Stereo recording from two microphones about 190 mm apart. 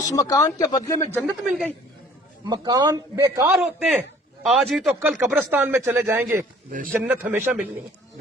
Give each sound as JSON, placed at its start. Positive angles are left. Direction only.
{"t": 0.1, "sound": "speech", "side_deg": 20}
{"t": 1.5, "sound": "a man's voice", "side_deg": 0}
{"t": 2.5, "sound": "a man's voice", "side_deg": -20}
{"t": 6.7, "sound": "speech", "side_deg": -45}
{"t": 6.9, "sound": "speech", "side_deg": -5}